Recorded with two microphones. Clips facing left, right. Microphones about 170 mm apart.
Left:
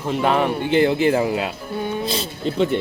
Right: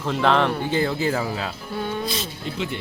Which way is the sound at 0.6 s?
65° left (ahead or behind).